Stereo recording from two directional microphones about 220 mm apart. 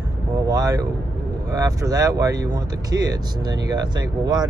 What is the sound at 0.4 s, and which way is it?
Vehicle, 15° right (ahead or behind).